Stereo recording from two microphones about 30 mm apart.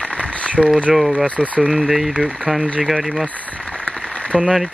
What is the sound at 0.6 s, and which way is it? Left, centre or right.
Speech, centre.